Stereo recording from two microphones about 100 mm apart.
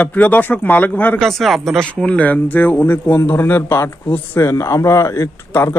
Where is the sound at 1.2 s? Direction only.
Centre (ahead or behind).